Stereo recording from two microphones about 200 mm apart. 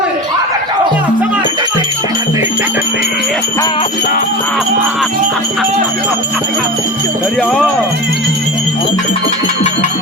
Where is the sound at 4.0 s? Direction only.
45° left (ahead or behind).